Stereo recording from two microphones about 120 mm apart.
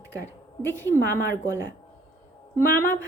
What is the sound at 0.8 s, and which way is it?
Speech, 20° left (ahead or behind).